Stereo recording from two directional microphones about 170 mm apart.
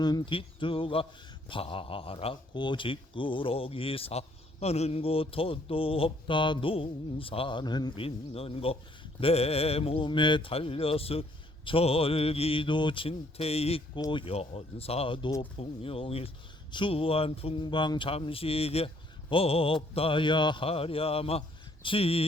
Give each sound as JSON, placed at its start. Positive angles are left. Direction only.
{"t": 0.0, "sound": "speech", "side_deg": 25}